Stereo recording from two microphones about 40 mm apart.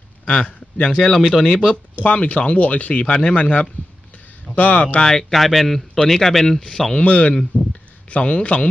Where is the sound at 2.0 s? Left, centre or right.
Left.